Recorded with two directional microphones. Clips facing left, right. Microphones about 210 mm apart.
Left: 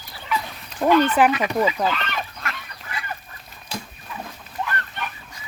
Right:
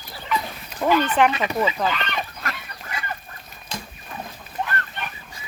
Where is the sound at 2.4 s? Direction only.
40° right (ahead or behind).